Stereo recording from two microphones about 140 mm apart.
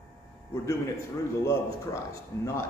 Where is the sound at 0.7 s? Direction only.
20° left (ahead or behind).